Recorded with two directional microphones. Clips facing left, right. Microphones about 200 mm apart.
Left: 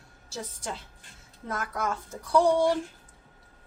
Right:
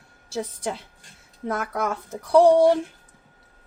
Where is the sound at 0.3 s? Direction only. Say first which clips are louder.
Right 8 dB; 65° right (ahead or behind).